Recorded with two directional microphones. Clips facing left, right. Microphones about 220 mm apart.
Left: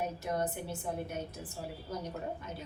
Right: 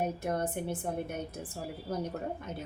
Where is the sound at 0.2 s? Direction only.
55° right (ahead or behind).